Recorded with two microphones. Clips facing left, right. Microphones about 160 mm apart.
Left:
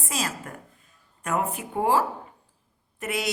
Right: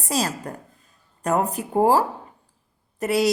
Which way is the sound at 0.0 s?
35° right (ahead or behind).